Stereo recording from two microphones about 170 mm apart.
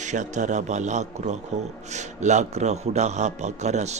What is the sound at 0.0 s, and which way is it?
A man's voice, 45° right (ahead or behind).